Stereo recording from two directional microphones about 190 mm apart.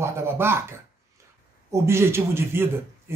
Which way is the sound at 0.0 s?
15° right (ahead or behind).